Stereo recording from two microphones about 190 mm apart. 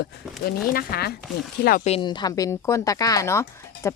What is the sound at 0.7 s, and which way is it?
Speech, 50° left (ahead or behind).